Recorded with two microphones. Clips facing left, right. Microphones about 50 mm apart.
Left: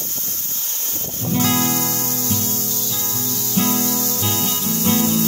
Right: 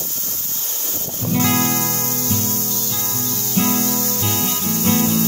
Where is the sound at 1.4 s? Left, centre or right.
Right.